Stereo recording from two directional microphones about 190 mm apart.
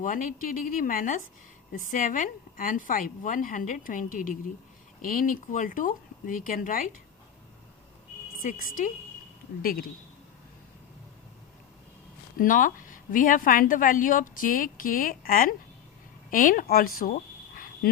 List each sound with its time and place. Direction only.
0.0 s a woman's voice: 45° left (ahead or behind)
8.4 s a woman's voice: 45° left (ahead or behind)
12.4 s a woman's voice: 45° left (ahead or behind)